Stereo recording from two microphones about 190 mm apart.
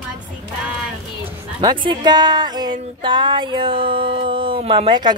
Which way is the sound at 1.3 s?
25° right (ahead or behind).